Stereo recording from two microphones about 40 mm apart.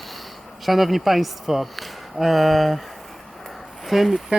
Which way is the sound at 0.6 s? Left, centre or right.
Centre.